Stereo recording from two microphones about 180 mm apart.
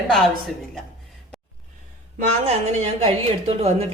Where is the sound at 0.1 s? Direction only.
Centre (ahead or behind).